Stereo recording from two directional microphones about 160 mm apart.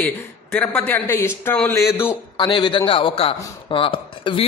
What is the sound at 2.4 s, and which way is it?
A man's voice, 30° left (ahead or behind).